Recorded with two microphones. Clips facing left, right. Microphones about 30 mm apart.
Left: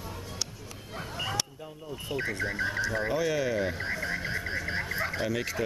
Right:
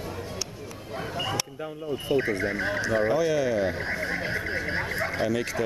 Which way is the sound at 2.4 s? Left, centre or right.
Centre.